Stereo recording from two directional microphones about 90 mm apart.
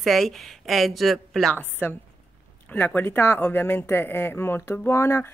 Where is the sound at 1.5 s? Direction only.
20° left (ahead or behind).